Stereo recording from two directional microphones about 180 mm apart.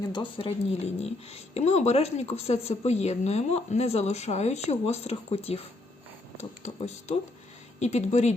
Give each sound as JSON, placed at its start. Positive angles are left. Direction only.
{"t": 0.1, "sound": "speech", "side_deg": 30}